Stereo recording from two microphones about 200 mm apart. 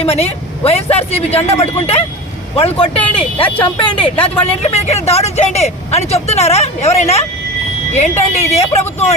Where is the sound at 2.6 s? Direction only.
30° left (ahead or behind).